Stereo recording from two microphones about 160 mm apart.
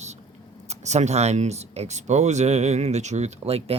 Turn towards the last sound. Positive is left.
turn(degrees=-40)  # may be behind; listen again after turning